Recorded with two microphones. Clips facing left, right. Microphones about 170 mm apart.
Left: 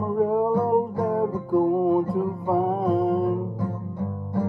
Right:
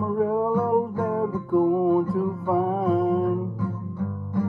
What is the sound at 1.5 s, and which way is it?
Music, centre (ahead or behind).